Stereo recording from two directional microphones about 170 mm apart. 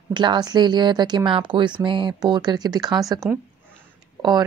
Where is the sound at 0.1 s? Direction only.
25° right (ahead or behind).